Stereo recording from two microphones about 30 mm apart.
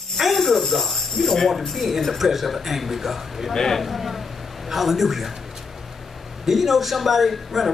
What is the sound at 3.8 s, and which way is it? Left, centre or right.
A man's voice, centre.